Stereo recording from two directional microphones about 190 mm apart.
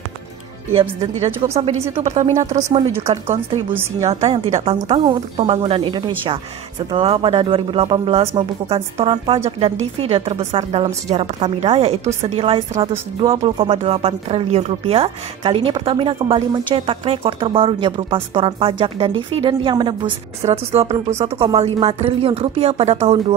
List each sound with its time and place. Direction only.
0.7 s speech: 35° right (ahead or behind)
4.0 s speech: 35° right (ahead or behind)